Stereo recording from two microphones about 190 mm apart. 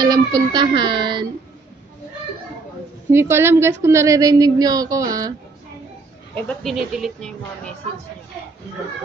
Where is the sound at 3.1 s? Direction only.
15° right (ahead or behind).